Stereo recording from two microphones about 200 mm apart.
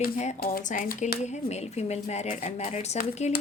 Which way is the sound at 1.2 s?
35° left (ahead or behind).